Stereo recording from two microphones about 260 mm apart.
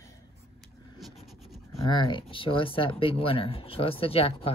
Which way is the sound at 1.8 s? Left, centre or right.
Centre.